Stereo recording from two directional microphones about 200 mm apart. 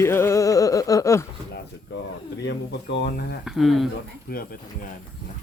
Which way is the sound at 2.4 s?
65° left (ahead or behind).